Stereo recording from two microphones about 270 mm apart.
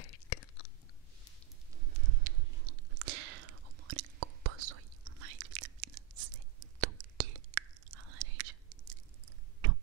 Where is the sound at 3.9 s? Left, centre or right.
Right.